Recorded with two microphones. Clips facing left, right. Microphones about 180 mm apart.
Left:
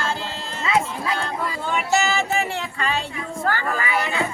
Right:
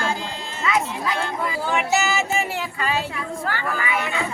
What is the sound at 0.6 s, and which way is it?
Music, 30° left (ahead or behind).